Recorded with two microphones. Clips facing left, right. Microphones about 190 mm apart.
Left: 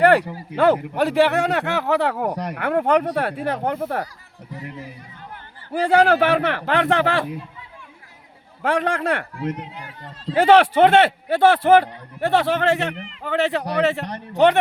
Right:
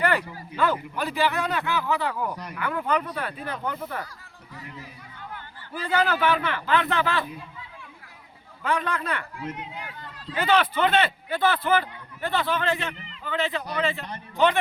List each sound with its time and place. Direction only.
0.0 s a man's voice: 75° left (ahead or behind)
5.7 s a man's voice: 80° left
8.6 s a man's voice: 80° left
9.6 s run: 35° left (ahead or behind)
10.3 s a man's voice: 80° left